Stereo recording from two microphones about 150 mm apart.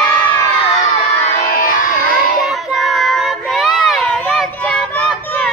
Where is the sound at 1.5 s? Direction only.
70° left (ahead or behind).